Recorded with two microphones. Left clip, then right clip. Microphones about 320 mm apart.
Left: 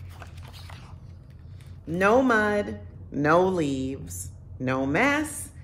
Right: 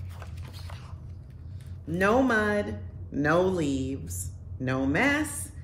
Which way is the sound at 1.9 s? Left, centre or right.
Centre.